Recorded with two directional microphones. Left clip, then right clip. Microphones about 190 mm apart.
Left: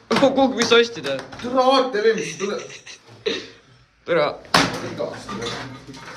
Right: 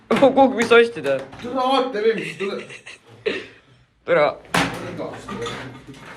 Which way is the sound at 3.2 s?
10° left (ahead or behind).